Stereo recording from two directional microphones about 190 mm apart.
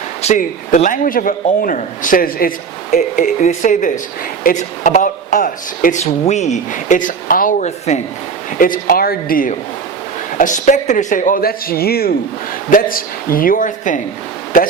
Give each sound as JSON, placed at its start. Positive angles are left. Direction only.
{"t": 0.2, "sound": "a man's voice", "side_deg": 40}